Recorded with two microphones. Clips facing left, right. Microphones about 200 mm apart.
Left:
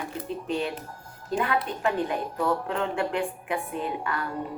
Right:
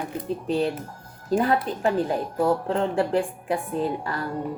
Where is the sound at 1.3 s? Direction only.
35° right (ahead or behind).